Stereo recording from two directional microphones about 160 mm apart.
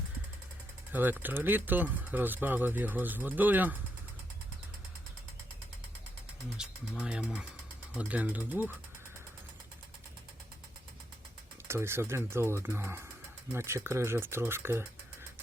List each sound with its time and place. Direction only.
0.9 s speech: 10° right (ahead or behind)
6.6 s speech: 5° right (ahead or behind)
11.7 s speech: 15° right (ahead or behind)